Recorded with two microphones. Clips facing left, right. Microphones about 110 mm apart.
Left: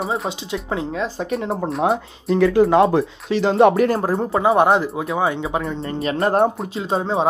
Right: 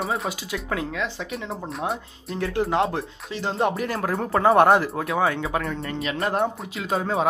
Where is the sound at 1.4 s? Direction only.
65° left (ahead or behind).